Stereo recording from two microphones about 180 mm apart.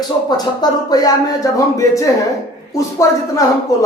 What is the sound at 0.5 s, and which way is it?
A man's voice, 20° left (ahead or behind).